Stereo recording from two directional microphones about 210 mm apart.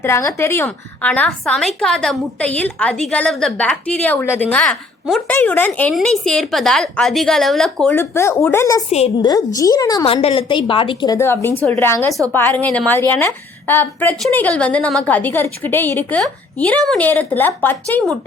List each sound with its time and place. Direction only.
0.0 s a woman's voice: 15° left (ahead or behind)
8.9 s a woman's voice: 30° left (ahead or behind); by 18.2 s 5° left (ahead or behind)